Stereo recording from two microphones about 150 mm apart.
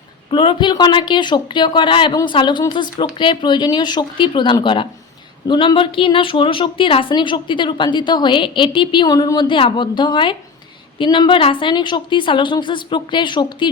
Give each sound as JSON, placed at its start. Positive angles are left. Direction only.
{"t": 0.3, "sound": "a woman's voice", "side_deg": 35}